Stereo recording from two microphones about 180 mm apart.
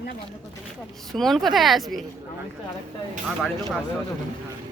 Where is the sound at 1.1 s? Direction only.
Centre (ahead or behind).